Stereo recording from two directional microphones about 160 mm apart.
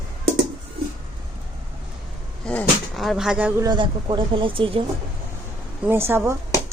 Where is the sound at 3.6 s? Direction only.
30° right (ahead or behind).